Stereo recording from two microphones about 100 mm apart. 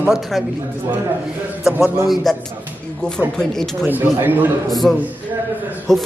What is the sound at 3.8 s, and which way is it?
Speech, 20° right (ahead or behind).